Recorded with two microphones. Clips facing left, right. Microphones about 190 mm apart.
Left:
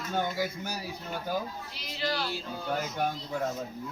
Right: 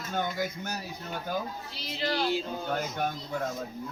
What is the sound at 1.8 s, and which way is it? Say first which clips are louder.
Speech: right 2 dB; 35° right (ahead or behind).